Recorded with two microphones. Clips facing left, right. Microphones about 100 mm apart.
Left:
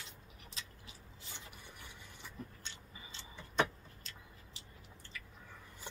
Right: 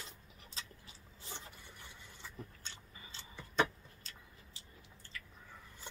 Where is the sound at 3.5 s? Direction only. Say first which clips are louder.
Right 1 dB; 35° right (ahead or behind).